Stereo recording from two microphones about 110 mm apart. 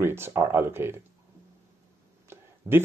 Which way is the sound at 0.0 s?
20° right (ahead or behind).